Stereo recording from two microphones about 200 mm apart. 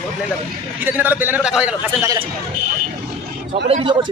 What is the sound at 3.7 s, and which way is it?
Speech, 25° right (ahead or behind).